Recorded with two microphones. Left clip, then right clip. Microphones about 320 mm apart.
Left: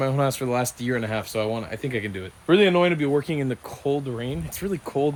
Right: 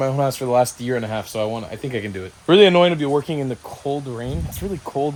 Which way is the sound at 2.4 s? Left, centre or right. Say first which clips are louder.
Right 6 dB; centre.